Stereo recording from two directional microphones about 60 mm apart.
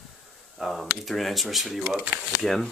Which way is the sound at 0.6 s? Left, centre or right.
Centre.